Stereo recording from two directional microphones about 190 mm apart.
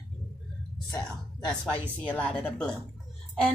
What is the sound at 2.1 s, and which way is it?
Speech, 10° left (ahead or behind).